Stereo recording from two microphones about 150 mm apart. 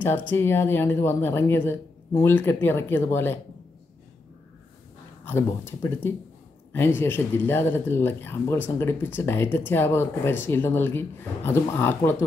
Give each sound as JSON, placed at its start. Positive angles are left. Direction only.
{"t": 0.3, "sound": "speech", "side_deg": 15}
{"t": 5.2, "sound": "speech", "side_deg": 15}